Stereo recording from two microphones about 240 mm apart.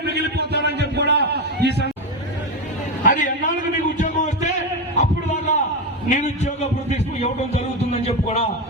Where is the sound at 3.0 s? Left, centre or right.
Left.